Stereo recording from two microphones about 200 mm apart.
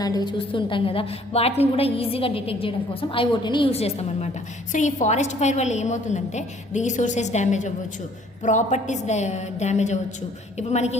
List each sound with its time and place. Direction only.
0.0 s a woman's voice: 20° left (ahead or behind)